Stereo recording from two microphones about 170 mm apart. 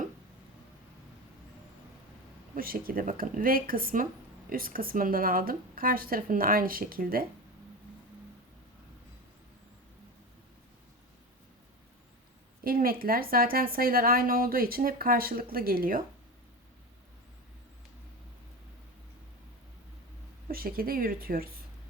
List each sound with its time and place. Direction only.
2.6 s a woman's voice: 60° right (ahead or behind)
12.6 s a woman's voice: 60° right (ahead or behind)
20.5 s a woman's voice: 60° right (ahead or behind)